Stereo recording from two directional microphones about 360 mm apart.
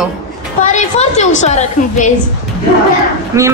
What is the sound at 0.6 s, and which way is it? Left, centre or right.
A woman's voice, centre.